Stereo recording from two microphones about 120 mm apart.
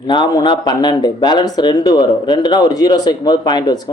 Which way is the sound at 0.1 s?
40° left (ahead or behind).